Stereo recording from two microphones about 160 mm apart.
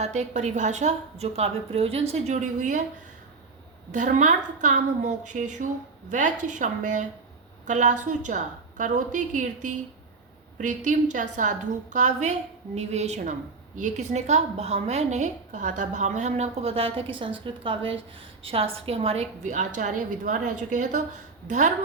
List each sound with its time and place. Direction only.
0.0 s a woman's voice: 45° right (ahead or behind)
3.9 s a woman's voice: 50° right (ahead or behind)